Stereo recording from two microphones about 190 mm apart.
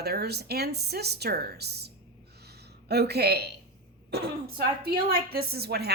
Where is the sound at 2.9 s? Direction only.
60° right (ahead or behind).